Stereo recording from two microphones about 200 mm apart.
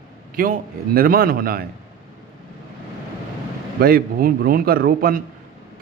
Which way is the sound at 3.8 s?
50° right (ahead or behind).